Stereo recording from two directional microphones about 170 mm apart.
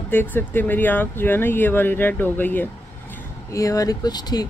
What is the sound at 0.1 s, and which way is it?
Speech, 10° left (ahead or behind).